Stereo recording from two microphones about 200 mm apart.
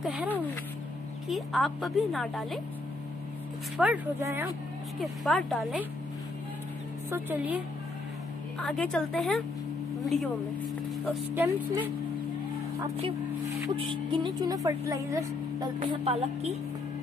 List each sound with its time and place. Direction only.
0.0 s a woman's voice: 5° right (ahead or behind)
3.7 s a woman's voice: 5° right (ahead or behind)
5.0 s a woman's voice: centre (ahead or behind)
7.1 s a woman's voice: 10° right (ahead or behind)
8.5 s a woman's voice: 5° left (ahead or behind)
13.7 s a woman's voice: 25° right (ahead or behind)
15.8 s music: 30° right (ahead or behind)